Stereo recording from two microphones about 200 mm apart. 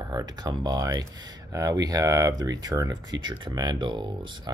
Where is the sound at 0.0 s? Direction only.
20° right (ahead or behind).